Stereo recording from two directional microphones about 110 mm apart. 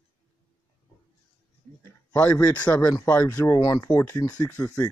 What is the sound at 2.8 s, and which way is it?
Speech, 20° left (ahead or behind).